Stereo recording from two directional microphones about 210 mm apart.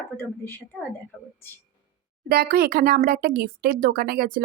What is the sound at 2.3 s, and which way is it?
Speech, 45° right (ahead or behind).